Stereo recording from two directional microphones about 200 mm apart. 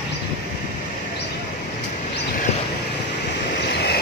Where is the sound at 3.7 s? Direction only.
55° left (ahead or behind).